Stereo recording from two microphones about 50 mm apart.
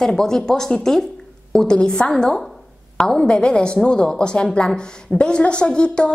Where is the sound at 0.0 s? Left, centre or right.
Centre.